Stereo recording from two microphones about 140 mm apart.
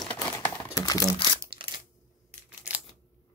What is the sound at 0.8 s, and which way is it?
Speech, 25° left (ahead or behind).